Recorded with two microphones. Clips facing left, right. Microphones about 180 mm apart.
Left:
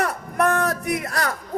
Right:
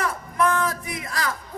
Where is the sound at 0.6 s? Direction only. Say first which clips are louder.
Left 6 dB; 70° left (ahead or behind).